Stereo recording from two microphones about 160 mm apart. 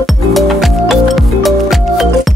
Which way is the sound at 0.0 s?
Centre (ahead or behind).